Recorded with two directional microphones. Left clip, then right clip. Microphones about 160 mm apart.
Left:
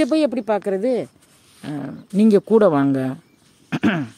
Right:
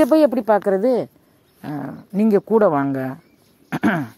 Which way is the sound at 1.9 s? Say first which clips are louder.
Left 2 dB; 45° left (ahead or behind).